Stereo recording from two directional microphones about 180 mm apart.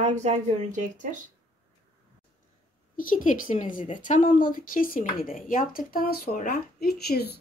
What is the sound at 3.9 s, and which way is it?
A woman's voice, 45° left (ahead or behind).